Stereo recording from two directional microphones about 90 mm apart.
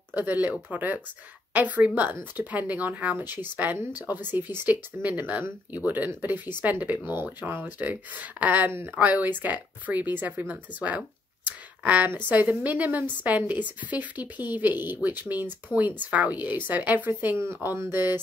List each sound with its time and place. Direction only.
0.1 s a woman's voice: 20° right (ahead or behind)